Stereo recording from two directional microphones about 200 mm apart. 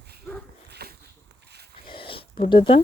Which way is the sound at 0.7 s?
55° right (ahead or behind).